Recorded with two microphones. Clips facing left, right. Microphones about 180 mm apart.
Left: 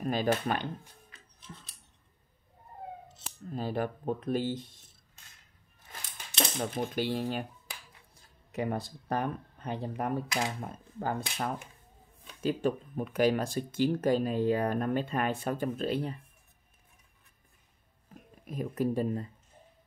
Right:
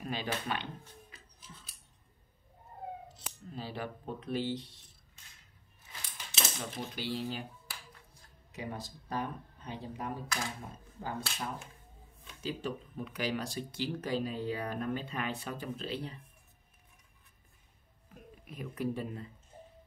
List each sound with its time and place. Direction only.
0.0 s speech: 45° left (ahead or behind)
1.4 s scissors: 5° right (ahead or behind)
3.4 s speech: 50° left (ahead or behind)
6.6 s speech: 50° left (ahead or behind)
8.5 s speech: 55° left (ahead or behind)
18.5 s speech: 40° left (ahead or behind)